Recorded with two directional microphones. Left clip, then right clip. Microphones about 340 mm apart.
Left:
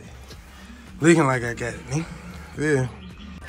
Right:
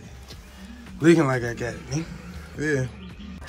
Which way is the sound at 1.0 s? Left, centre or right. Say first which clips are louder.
Left 1 dB; centre.